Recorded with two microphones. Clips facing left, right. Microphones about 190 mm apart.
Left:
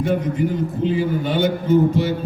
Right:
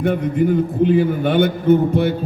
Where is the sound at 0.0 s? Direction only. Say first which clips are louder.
Right 3 dB; 60° right (ahead or behind).